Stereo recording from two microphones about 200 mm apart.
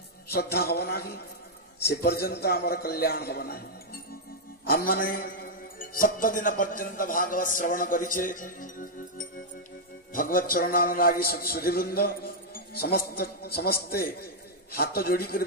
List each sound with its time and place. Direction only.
0.3 s a man's voice: 55° left (ahead or behind)
4.6 s a man's voice: 50° left (ahead or behind)